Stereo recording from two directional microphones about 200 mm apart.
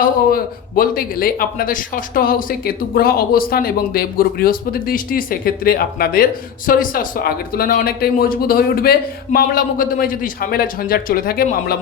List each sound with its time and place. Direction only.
0.0 s speech: 45° left (ahead or behind)